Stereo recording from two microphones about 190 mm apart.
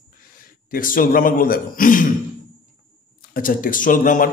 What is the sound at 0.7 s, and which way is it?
Speech, 45° left (ahead or behind).